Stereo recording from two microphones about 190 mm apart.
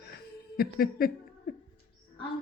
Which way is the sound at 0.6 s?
50° left (ahead or behind).